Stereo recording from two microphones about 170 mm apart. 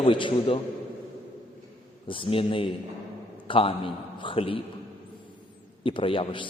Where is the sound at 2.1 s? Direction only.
30° left (ahead or behind).